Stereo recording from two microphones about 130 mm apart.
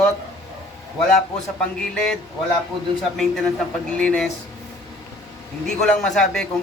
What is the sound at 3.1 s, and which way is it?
A man's voice, centre (ahead or behind).